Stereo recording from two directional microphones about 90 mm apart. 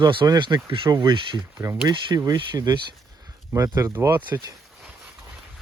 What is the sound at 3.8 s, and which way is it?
Speech, 35° right (ahead or behind).